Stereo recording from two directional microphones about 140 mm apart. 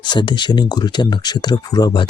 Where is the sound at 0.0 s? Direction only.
30° left (ahead or behind).